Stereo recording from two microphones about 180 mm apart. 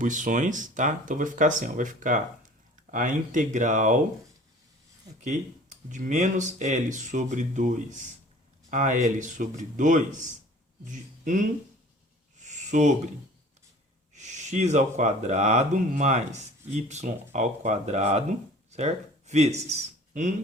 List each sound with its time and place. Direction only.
0.0 s speech: 45° right (ahead or behind)
5.2 s speech: 45° right (ahead or behind)
12.5 s a sound: 40° right (ahead or behind)
14.1 s speech: 40° right (ahead or behind)